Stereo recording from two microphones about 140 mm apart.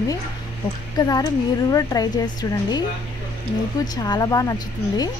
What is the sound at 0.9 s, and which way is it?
Speech, 25° left (ahead or behind).